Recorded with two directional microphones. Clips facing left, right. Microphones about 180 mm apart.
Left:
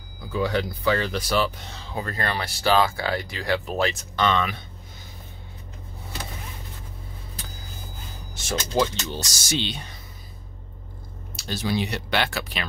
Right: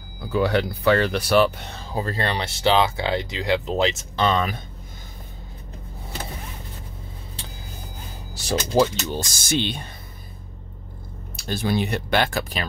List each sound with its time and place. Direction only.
0.3 s speech: 65° right (ahead or behind)
1.9 s speech: 30° right (ahead or behind)
4.2 s speech: 35° right (ahead or behind)
7.4 s vehicle: 30° right (ahead or behind)
8.4 s speech: 35° right (ahead or behind)
9.1 s speech: 50° right (ahead or behind)
11.3 s speech: 55° right (ahead or behind)